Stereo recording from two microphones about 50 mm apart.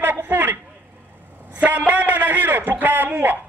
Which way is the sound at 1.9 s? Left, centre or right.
Right.